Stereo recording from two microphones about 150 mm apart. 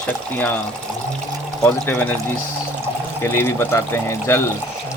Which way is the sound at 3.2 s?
15° left (ahead or behind).